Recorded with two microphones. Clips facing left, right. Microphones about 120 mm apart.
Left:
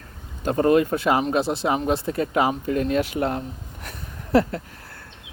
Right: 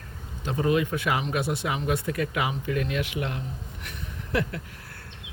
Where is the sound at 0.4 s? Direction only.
50° left (ahead or behind).